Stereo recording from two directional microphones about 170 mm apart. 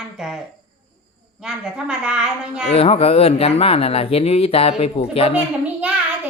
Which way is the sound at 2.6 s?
35° left (ahead or behind).